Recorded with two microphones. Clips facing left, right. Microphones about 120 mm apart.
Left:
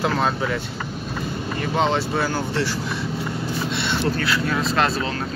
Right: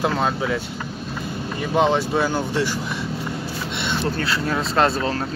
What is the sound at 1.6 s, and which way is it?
Speech, 10° right (ahead or behind).